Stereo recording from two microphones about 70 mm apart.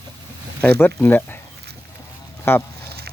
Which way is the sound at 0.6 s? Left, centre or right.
Left.